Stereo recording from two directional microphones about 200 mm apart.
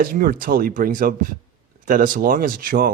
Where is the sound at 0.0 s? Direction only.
45° right (ahead or behind).